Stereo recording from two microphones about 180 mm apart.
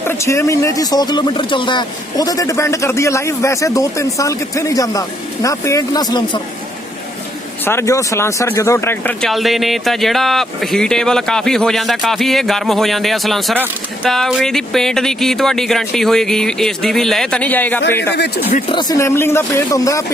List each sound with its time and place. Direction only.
0.1 s speech: 15° left (ahead or behind)
7.6 s speech: 15° left (ahead or behind)
9.3 s speech: centre (ahead or behind)
18.7 s speech: 25° left (ahead or behind)